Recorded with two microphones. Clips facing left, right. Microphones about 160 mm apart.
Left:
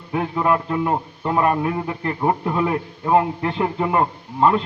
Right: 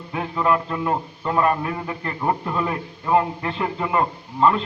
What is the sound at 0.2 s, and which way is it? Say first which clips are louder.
A man's voice: left 1 dB; 15° left (ahead or behind).